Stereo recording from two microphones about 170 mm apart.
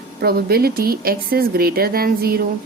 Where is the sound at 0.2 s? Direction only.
65° right (ahead or behind).